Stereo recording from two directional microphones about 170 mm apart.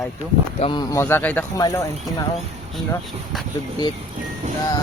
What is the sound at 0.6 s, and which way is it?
Speech, 25° left (ahead or behind).